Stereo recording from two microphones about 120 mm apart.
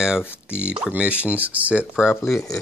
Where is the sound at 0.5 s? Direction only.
10° right (ahead or behind).